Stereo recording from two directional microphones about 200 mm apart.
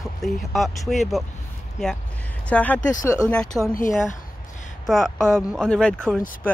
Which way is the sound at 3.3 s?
5° left (ahead or behind).